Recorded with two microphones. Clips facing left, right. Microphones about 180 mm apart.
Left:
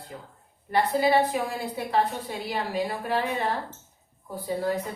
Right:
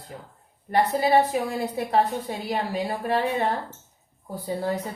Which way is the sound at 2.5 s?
35° right (ahead or behind).